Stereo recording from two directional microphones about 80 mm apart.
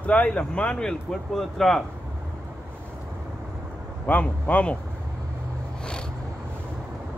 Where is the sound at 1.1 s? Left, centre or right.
Centre.